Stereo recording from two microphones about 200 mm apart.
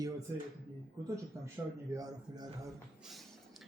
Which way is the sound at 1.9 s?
20° right (ahead or behind).